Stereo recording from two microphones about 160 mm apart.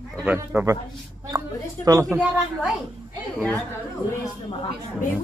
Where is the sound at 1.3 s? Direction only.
20° right (ahead or behind).